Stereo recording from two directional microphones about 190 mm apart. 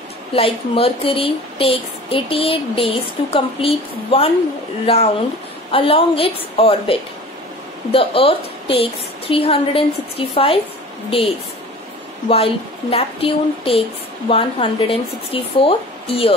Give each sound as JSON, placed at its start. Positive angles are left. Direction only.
{"t": 0.3, "sound": "a woman's voice", "side_deg": 30}